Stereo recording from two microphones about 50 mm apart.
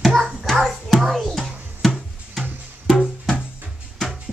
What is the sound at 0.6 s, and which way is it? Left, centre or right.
Music, centre.